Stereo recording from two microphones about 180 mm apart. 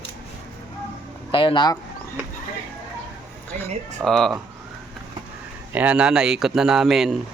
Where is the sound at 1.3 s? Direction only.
30° left (ahead or behind).